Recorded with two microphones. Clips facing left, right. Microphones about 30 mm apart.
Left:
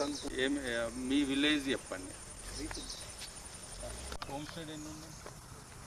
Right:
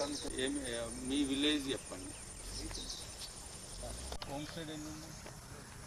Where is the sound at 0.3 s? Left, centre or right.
Left.